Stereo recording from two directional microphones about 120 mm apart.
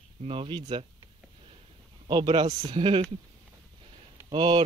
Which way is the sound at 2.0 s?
40° right (ahead or behind).